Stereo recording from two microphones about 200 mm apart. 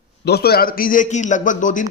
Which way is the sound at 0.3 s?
50° left (ahead or behind).